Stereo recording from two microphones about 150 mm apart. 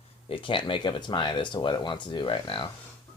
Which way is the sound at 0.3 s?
35° left (ahead or behind).